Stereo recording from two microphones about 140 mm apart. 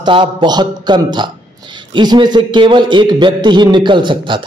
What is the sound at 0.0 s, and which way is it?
A man's voice, 35° right (ahead or behind).